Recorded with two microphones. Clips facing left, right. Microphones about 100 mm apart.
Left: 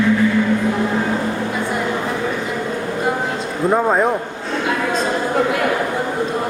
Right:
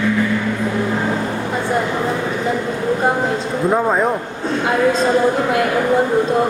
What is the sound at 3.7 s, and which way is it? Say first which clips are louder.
Speech: left 1 dB; 5° left (ahead or behind).